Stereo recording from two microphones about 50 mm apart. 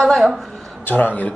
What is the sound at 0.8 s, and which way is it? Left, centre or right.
Speech, left.